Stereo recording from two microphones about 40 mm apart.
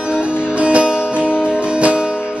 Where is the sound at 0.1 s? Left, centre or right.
Right.